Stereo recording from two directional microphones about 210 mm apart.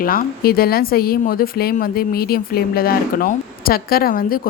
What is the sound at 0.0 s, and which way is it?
A woman's voice, 45° left (ahead or behind).